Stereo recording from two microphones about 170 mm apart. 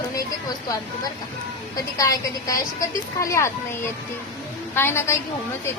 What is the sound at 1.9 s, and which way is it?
A woman's voice, 20° left (ahead or behind).